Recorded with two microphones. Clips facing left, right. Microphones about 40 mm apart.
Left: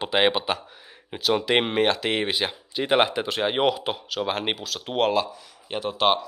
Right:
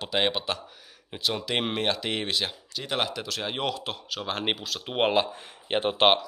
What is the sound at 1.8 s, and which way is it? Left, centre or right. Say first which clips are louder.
Speech: left 5 dB; centre.